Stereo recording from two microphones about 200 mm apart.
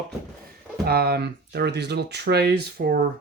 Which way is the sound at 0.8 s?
50° right (ahead or behind).